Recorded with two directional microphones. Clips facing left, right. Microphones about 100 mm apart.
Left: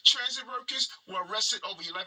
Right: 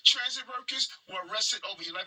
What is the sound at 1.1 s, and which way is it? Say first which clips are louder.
Speech: left 3 dB; 25° left (ahead or behind).